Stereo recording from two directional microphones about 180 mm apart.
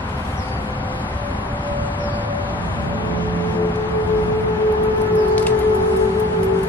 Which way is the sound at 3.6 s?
10° left (ahead or behind).